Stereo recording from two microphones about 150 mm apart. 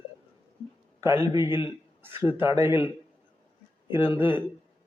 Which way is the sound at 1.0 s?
15° right (ahead or behind).